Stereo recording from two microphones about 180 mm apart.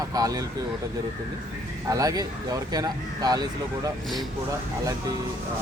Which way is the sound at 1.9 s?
20° right (ahead or behind).